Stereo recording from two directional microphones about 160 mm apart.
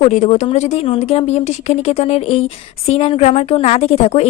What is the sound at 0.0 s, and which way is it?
A woman's voice, 50° left (ahead or behind).